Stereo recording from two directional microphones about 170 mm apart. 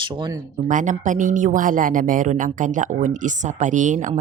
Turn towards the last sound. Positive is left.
turn(degrees=-50)  # may be behind; listen again after turning